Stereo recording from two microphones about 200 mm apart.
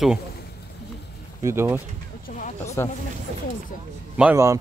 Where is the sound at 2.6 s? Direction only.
15° left (ahead or behind).